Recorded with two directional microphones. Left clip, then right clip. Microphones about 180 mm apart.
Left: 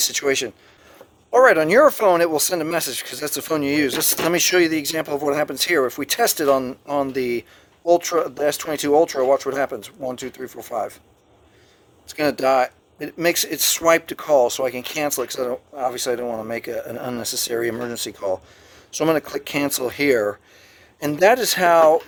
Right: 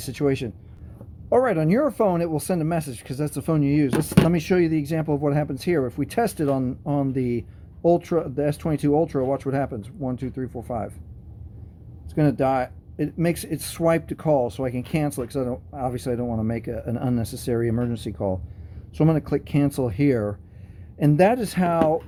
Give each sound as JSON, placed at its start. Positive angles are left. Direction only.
{"t": 0.0, "sound": "speech", "side_deg": 20}
{"t": 12.0, "sound": "speech", "side_deg": 20}